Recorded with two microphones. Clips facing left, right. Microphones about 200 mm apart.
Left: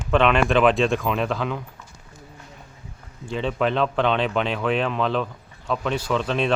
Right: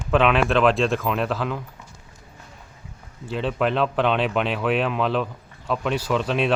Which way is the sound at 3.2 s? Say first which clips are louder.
Even; 5° right (ahead or behind).